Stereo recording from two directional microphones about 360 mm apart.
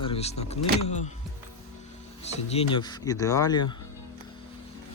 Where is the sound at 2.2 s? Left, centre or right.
Centre.